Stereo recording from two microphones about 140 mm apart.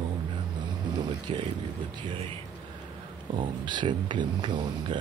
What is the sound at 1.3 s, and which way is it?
Speech, 45° right (ahead or behind).